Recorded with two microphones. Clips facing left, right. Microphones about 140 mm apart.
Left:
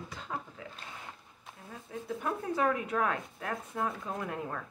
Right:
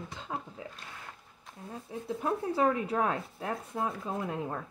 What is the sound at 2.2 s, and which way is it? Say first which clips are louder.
Speech: right 3 dB; 30° right (ahead or behind).